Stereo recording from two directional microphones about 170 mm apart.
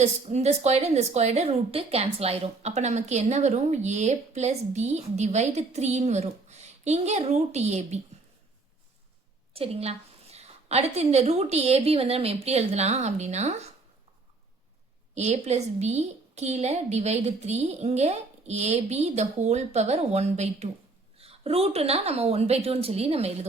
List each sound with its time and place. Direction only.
0.0 s a woman's voice: 40° right (ahead or behind)
9.5 s a woman's voice: 35° right (ahead or behind)
15.1 s a woman's voice: 40° right (ahead or behind)